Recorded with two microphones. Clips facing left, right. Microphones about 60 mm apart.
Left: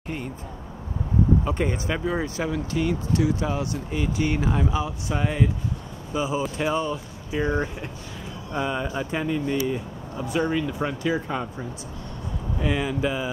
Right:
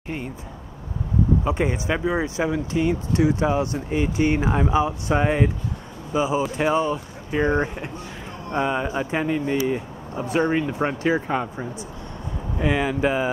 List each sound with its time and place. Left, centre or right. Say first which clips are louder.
1.4 s speech: right 3 dB; centre; by 5.5 s right
6.1 s speech: right 4 dB; centre
12.8 s speech: right 4 dB; right